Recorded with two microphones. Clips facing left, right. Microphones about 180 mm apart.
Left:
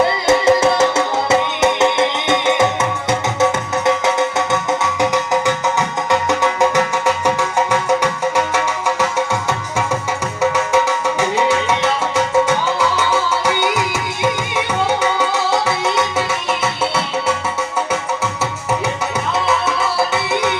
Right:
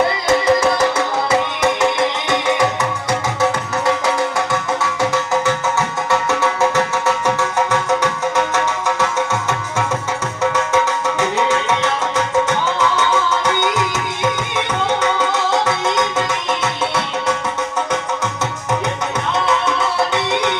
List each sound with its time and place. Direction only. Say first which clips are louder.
0.3 s music: left 2 dB; 25° left (ahead or behind)
3.8 s music: left 2 dB; 20° left (ahead or behind)